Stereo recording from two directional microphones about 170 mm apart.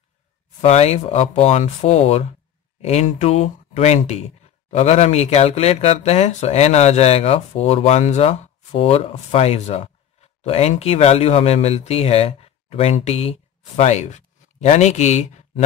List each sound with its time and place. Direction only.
0.6 s speech: 40° left (ahead or behind)